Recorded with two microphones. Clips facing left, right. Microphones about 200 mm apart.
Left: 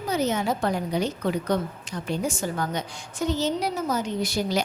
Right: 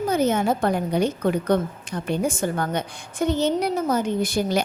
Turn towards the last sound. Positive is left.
turn(degrees=-55)  # may be behind; listen again after turning